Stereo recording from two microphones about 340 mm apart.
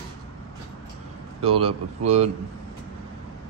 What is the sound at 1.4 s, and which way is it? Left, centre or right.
Speech, right.